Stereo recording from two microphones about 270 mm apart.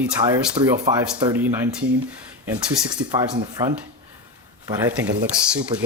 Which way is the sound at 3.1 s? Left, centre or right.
Centre.